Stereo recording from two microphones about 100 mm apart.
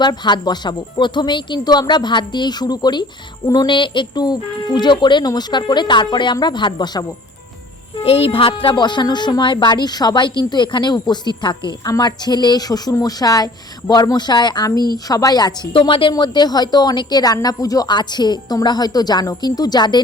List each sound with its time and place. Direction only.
0.0 s speech: 45° left (ahead or behind)
3.7 s speech: 55° left (ahead or behind)
8.0 s a woman's voice: 80° left; by 15.5 s 40° left (ahead or behind)
15.7 s a woman's voice: 55° left (ahead or behind)
16.1 s speech: 45° left (ahead or behind)